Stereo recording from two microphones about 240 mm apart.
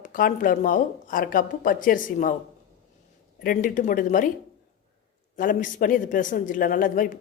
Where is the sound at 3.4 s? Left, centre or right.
Left.